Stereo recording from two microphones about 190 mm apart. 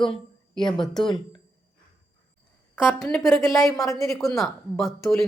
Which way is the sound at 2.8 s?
Centre (ahead or behind).